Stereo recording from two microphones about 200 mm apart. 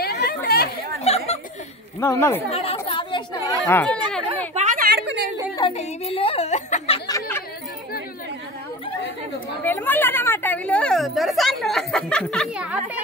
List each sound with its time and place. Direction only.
0.0 s chatter: 50° left (ahead or behind)
1.0 s a sound: 30° left (ahead or behind)
2.0 s speech: 10° left (ahead or behind)
2.5 s speech: 30° left (ahead or behind)
3.6 s speech: 10° left (ahead or behind)
4.6 s a sound: 40° right (ahead or behind)
5.0 s a sound: 60° right (ahead or behind)
5.6 s a woman's voice: 30° left (ahead or behind)
7.1 s chatter: 15° left (ahead or behind)
9.6 s speech: 10° left (ahead or behind)